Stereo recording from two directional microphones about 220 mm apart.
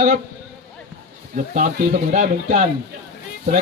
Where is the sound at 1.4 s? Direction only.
35° right (ahead or behind).